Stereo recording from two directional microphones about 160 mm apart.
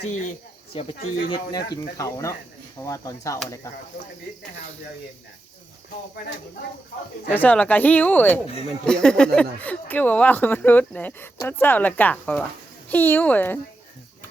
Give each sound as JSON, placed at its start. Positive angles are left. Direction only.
{"t": 0.0, "sound": "speech", "side_deg": 50}
{"t": 7.3, "sound": "speech", "side_deg": 10}